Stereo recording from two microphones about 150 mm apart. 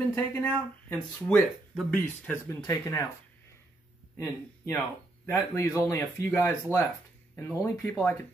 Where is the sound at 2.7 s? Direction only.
20° left (ahead or behind).